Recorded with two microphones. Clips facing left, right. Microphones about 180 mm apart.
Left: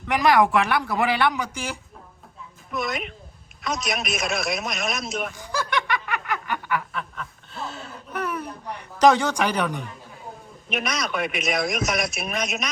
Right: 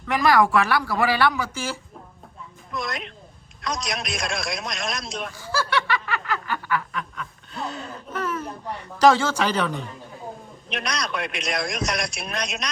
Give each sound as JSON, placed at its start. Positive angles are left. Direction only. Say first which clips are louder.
{"t": 0.1, "sound": "speech", "louder": "even", "side_deg": 20}
{"t": 2.7, "sound": "a man's voice", "louder": "left 3 dB", "side_deg": 0}
{"t": 5.4, "sound": "snicker", "louder": "right 6 dB", "side_deg": 15}
{"t": 6.9, "sound": "a sound", "louder": "right 1 dB", "side_deg": 0}
{"t": 8.1, "sound": "a sound", "louder": "even", "side_deg": 15}
{"t": 10.7, "sound": "a man's voice", "louder": "left 2 dB", "side_deg": 0}